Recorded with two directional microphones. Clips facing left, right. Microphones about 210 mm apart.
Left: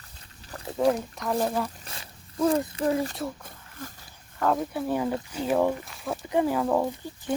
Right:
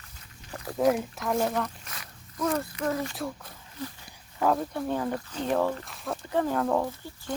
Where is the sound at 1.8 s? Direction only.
30° left (ahead or behind).